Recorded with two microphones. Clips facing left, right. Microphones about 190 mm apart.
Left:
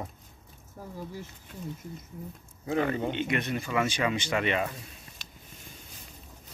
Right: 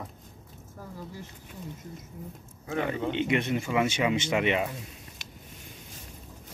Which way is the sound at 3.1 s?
20° right (ahead or behind).